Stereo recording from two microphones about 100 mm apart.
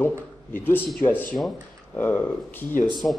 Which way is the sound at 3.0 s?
5° left (ahead or behind).